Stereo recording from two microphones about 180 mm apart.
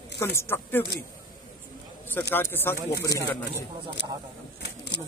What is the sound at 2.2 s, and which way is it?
Speech, 10° left (ahead or behind).